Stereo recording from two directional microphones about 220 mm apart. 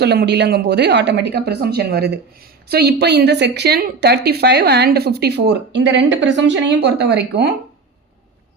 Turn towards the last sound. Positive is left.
turn(degrees=-50)  # may be behind; listen again after turning